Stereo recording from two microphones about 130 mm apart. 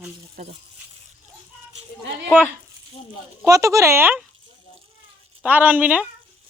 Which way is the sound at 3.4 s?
25° right (ahead or behind).